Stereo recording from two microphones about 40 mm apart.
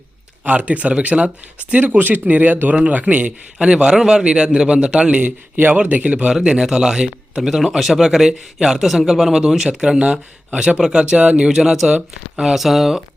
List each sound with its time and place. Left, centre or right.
0.4 s speech: right
1.8 s speech: right
3.6 s speech: right
6.4 s speech: centre
7.5 s speech: centre
9.6 s speech: centre
11.4 s speech: centre